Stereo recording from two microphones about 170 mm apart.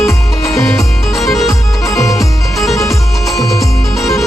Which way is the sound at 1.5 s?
20° left (ahead or behind).